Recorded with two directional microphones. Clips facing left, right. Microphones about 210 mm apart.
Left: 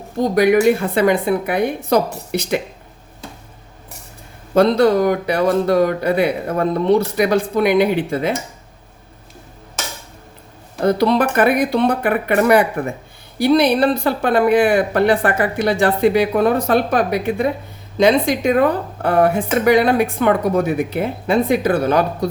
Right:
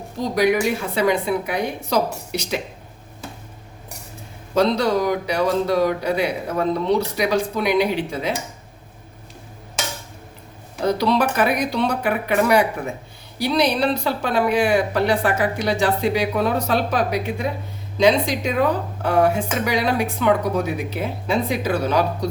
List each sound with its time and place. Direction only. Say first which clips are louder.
0.2 s speech: left 5 dB; 55° left (ahead or behind)
4.5 s a woman's voice: left 5 dB; 55° left (ahead or behind)
10.8 s a woman's voice: left 4 dB; 55° left (ahead or behind)